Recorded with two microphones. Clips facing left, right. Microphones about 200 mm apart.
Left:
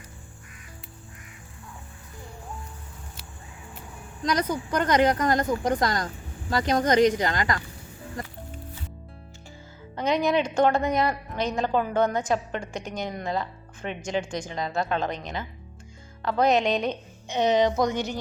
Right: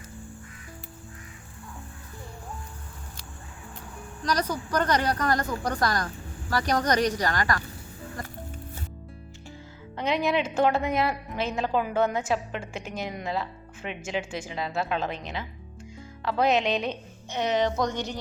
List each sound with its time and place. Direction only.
4.8 s a woman's voice: 20° left (ahead or behind)
9.9 s a woman's voice: centre (ahead or behind)
17.2 s a woman's voice: 20° left (ahead or behind)